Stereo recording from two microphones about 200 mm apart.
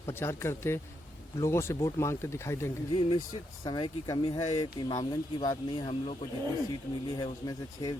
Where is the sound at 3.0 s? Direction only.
25° left (ahead or behind).